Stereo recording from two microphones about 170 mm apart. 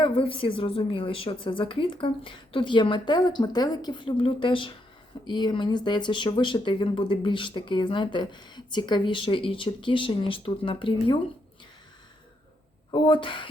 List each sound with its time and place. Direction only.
0.0 s a woman's voice: 30° left (ahead or behind)
12.9 s speech: 30° left (ahead or behind)